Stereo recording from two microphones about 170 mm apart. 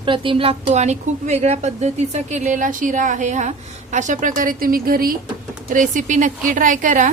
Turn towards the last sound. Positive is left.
turn(degrees=-50)  # may be behind; listen again after turning